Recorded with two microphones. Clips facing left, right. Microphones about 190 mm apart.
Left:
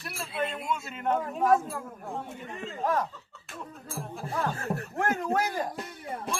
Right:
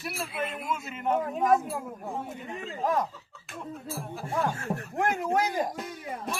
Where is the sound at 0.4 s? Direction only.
25° left (ahead or behind).